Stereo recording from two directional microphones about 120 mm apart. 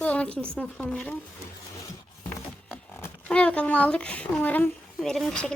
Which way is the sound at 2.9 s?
20° left (ahead or behind).